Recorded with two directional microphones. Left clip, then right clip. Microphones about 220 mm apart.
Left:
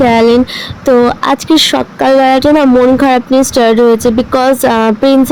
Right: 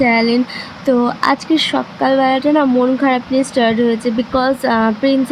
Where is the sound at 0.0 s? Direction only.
30° left (ahead or behind).